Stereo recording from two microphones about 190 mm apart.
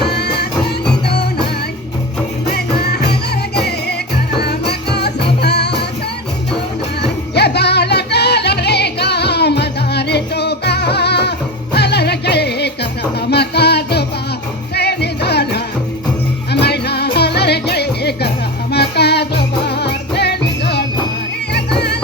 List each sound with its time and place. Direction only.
0.0 s music: 60° left (ahead or behind)
2.5 s music: 55° left (ahead or behind)
7.3 s music: 60° left (ahead or behind)